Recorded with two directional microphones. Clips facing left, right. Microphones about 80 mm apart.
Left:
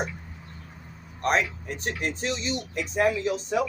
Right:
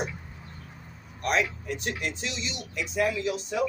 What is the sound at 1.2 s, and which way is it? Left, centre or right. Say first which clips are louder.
Speech: left 2 dB; left.